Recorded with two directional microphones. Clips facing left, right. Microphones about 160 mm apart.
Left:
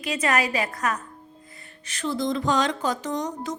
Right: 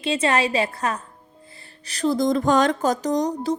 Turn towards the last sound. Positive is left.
turn(degrees=-35)  # may be behind; listen again after turning